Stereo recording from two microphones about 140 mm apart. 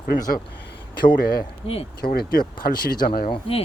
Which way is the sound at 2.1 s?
90° left.